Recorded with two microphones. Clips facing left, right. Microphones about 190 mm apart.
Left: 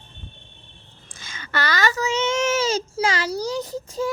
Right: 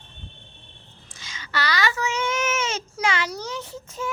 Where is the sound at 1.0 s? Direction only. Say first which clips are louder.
Left 2 dB; 50° left (ahead or behind).